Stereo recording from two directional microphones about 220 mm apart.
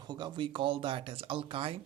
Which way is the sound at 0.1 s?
20° right (ahead or behind).